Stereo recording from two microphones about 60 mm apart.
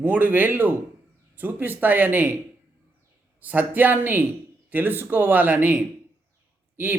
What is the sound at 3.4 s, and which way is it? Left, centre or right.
Speech, right.